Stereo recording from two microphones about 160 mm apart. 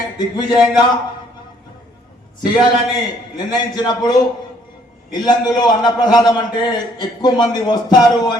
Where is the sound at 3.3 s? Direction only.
25° left (ahead or behind).